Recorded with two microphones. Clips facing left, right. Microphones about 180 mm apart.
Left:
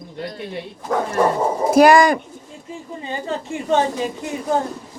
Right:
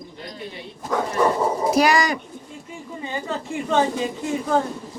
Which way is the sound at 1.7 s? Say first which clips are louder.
Left 9 dB; 50° left (ahead or behind).